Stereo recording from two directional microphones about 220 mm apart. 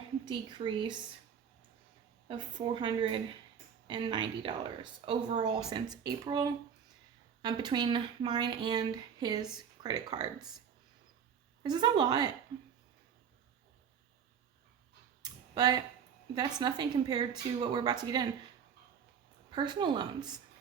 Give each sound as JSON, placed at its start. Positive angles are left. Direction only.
{"t": 0.3, "sound": "speech", "side_deg": -20}
{"t": 2.2, "sound": "speech", "side_deg": -20}
{"t": 11.6, "sound": "speech", "side_deg": -20}
{"t": 15.2, "sound": "clicking", "side_deg": -20}
{"t": 16.6, "sound": "speech", "side_deg": -20}
{"t": 19.5, "sound": "speech", "side_deg": -20}